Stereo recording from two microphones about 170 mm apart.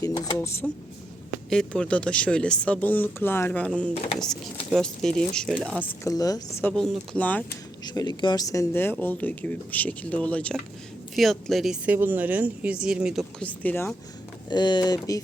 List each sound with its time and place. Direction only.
0.0 s speech: 20° left (ahead or behind)
1.5 s speech: 5° left (ahead or behind)
4.7 s speech: 5° left (ahead or behind)
5.8 s speech: 20° left (ahead or behind)
7.9 s speech: 25° left (ahead or behind); by 13.2 s 5° right (ahead or behind)
13.4 s speech: 10° left (ahead or behind)
14.5 s speech: 25° left (ahead or behind)